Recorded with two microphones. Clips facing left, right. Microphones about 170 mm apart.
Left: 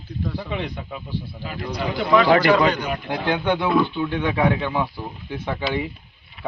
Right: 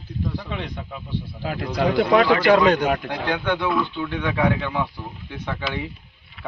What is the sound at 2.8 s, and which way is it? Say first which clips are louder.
Speech: right 5 dB; 90° right.